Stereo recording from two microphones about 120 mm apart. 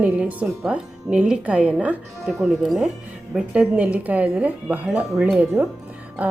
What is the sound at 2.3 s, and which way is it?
Speech, 25° right (ahead or behind).